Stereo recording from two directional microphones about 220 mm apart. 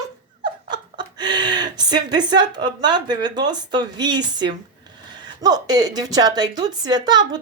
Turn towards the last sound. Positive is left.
turn(degrees=-20)  # may be behind; listen again after turning